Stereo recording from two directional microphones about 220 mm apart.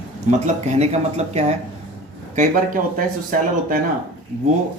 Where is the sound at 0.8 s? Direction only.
30° right (ahead or behind).